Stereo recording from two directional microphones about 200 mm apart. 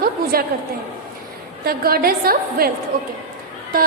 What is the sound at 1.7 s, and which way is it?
A woman's voice, 50° right (ahead or behind).